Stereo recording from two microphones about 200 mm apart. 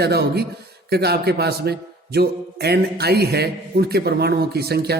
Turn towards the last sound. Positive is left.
turn(degrees=-50)  # may be behind; listen again after turning